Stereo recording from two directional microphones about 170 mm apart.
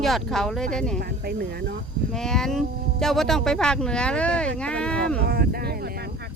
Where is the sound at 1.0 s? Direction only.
65° right (ahead or behind).